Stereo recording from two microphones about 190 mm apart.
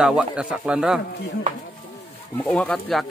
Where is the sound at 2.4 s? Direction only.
5° left (ahead or behind).